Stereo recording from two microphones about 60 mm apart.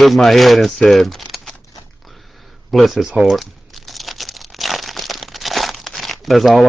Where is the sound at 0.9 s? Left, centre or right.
Centre.